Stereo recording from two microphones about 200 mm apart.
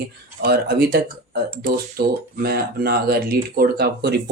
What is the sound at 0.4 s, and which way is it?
Speech, 50° right (ahead or behind).